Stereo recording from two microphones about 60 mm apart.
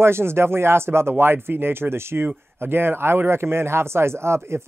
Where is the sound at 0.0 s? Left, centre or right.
Right.